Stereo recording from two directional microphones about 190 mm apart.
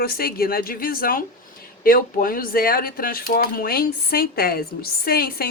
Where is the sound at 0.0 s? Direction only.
50° left (ahead or behind).